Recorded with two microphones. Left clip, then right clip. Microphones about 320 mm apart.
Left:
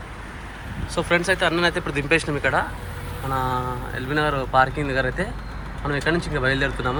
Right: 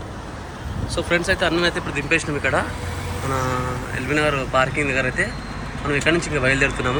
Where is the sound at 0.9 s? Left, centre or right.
Centre.